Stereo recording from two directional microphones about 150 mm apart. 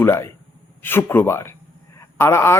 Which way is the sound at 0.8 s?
15° left (ahead or behind).